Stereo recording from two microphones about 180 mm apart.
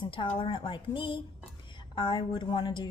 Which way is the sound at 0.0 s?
30° left (ahead or behind).